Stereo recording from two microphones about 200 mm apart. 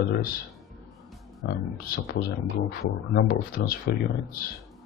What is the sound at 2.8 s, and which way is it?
Speech, 50° left (ahead or behind).